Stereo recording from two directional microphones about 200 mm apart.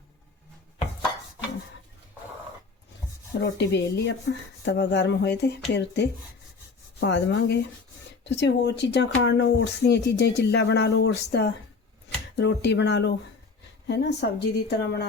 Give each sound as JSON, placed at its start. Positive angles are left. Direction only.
{"t": 3.4, "sound": "speech", "side_deg": 60}